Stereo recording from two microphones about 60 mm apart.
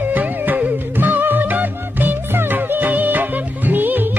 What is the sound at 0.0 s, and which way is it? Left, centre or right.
Music, right.